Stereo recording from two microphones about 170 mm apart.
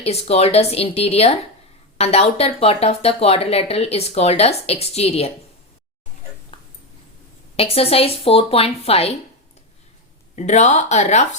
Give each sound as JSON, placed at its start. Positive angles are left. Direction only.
{"t": 0.0, "sound": "speech", "side_deg": 35}
{"t": 6.5, "sound": "a sound", "side_deg": 30}
{"t": 7.5, "sound": "speech", "side_deg": 35}
{"t": 10.3, "sound": "speech", "side_deg": 45}